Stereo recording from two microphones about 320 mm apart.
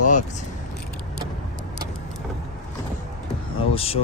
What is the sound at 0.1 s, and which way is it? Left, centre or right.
Speech, left.